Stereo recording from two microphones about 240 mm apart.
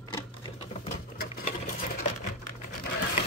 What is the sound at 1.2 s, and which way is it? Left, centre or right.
Sewing machine, left.